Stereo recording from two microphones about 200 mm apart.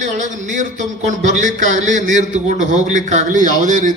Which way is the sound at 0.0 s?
40° right (ahead or behind).